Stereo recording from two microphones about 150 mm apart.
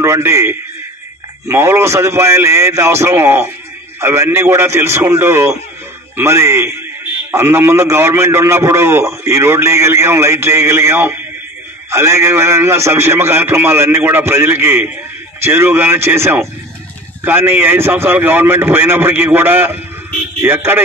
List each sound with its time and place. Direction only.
0.0 s a man's voice: 20° right (ahead or behind)